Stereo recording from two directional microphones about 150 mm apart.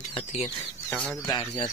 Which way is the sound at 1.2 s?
30° left (ahead or behind).